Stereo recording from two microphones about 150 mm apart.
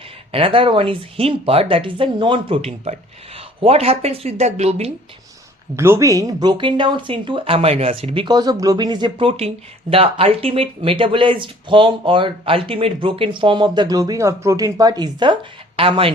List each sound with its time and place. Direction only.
0.3 s speech: 40° right (ahead or behind)
5.7 s speech: 15° right (ahead or behind); by 16.1 s 35° right (ahead or behind)